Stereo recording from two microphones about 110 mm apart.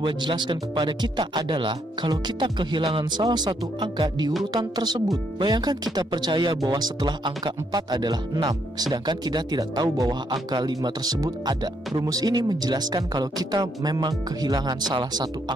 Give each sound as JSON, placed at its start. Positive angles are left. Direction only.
{"t": 0.0, "sound": "speech", "side_deg": -45}